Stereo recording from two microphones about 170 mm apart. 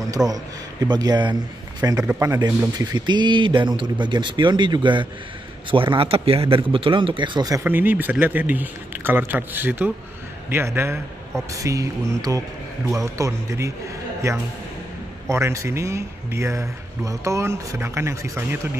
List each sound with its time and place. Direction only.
0.3 s a man's voice: 20° right (ahead or behind)